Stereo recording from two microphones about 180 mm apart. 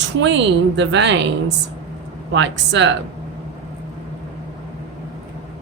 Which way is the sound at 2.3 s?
85° right.